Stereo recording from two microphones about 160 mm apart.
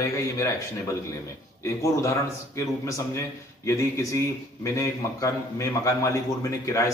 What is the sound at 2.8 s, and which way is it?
A man's voice, 20° left (ahead or behind).